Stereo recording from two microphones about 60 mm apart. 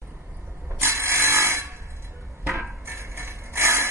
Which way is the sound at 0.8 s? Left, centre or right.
Right.